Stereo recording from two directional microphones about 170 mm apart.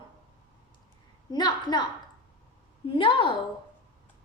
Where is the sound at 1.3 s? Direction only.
25° left (ahead or behind).